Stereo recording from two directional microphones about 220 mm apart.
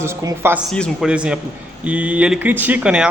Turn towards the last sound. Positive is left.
turn(degrees=-5)  # may be behind; listen again after turning